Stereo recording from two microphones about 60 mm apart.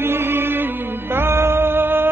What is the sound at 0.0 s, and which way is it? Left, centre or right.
Music, right.